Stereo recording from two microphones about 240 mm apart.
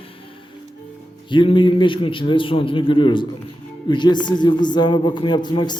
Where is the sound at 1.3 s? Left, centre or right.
Centre.